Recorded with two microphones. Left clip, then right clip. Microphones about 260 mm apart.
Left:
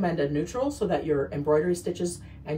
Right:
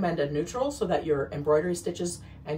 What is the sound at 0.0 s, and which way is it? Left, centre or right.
Speech, centre.